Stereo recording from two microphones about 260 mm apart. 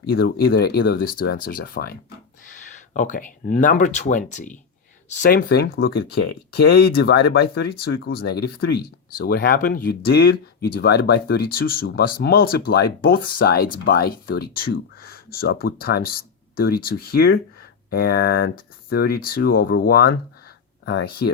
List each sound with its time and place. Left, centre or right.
0.0 s speech: left